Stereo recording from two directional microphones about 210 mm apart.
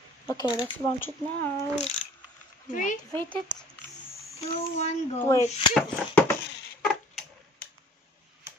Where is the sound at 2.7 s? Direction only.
40° left (ahead or behind).